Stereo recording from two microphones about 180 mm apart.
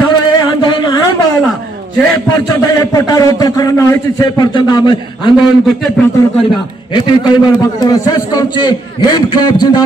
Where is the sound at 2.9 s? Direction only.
20° left (ahead or behind).